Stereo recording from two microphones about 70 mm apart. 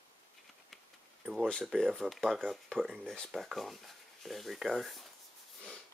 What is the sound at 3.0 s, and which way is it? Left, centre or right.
Speech, centre.